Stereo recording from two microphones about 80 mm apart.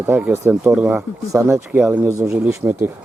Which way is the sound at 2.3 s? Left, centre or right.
Centre.